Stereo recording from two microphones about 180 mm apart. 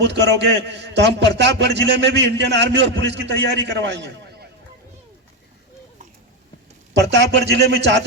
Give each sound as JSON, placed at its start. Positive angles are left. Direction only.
{"t": 0.0, "sound": "a man's voice", "side_deg": -70}
{"t": 6.9, "sound": "a man's voice", "side_deg": -75}